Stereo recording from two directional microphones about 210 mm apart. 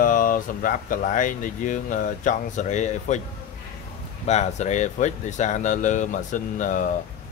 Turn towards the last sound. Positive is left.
turn(degrees=40)  # may be behind; listen again after turning